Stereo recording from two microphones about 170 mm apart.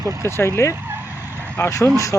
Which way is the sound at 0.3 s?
15° left (ahead or behind).